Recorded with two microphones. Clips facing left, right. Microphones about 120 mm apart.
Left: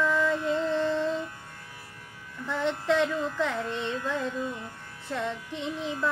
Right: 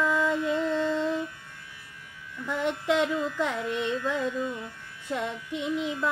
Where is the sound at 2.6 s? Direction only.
10° right (ahead or behind).